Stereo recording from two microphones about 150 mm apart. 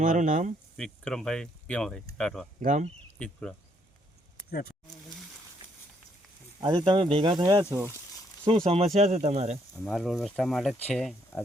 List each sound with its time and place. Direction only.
0.0 s speech: 60° right (ahead or behind)
0.8 s speech: 5° left (ahead or behind)
2.6 s speech: 55° right (ahead or behind)
3.2 s speech: 5° left (ahead or behind)
6.6 s speech: 30° right (ahead or behind)
7.6 s speech: 15° right (ahead or behind)
8.4 s speech: 40° right (ahead or behind)
9.7 s speech: 5° left (ahead or behind)